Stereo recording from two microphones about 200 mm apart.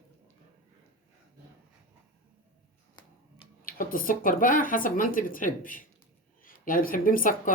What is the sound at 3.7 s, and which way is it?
Speech, 45° left (ahead or behind).